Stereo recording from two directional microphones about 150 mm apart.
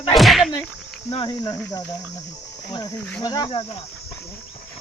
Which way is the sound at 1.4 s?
25° left (ahead or behind).